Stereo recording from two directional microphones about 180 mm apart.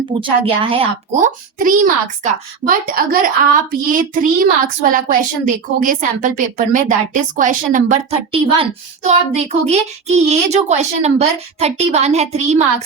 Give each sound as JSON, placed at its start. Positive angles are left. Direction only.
{"t": 0.1, "sound": "a woman's voice", "side_deg": -30}
{"t": 1.1, "sound": "a child's voice", "side_deg": -45}
{"t": 8.3, "sound": "a child's voice", "side_deg": -35}